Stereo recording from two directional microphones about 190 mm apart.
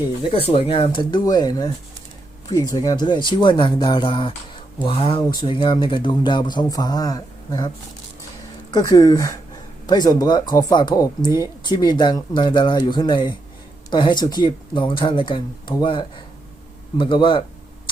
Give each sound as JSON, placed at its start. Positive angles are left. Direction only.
{"t": 0.3, "sound": "speech", "side_deg": 30}
{"t": 8.7, "sound": "speech", "side_deg": 20}